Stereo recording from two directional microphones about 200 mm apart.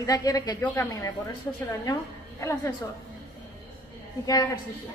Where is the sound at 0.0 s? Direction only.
20° left (ahead or behind).